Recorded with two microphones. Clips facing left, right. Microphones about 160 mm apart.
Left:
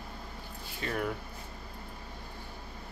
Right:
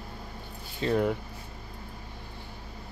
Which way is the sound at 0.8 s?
25° right (ahead or behind).